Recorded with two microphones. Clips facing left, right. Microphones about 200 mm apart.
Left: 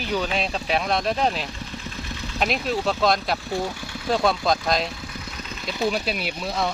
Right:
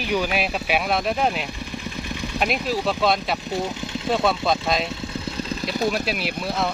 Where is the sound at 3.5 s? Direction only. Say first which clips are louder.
Right 1 dB; 20° right (ahead or behind).